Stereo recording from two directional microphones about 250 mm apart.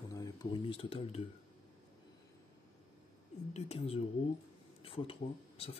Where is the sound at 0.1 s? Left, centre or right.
Centre.